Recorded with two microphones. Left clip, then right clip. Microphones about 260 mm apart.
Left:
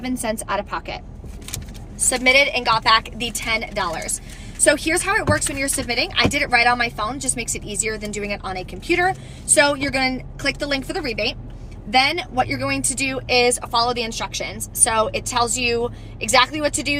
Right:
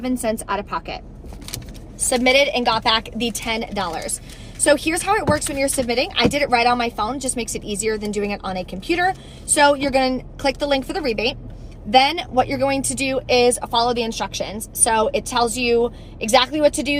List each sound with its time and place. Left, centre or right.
0.0 s speech: centre
2.0 s a woman's voice: centre